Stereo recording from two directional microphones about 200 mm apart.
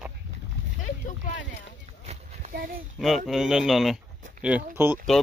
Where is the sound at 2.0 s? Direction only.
30° right (ahead or behind).